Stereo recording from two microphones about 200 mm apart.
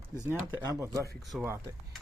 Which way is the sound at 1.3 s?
5° right (ahead or behind).